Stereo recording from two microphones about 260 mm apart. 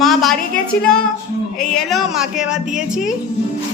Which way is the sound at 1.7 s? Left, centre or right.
Centre.